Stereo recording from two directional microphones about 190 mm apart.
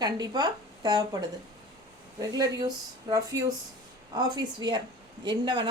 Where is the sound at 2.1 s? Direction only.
20° right (ahead or behind).